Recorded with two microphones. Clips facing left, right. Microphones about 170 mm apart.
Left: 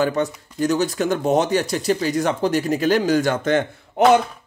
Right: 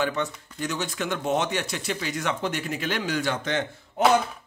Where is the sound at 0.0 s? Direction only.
40° left (ahead or behind).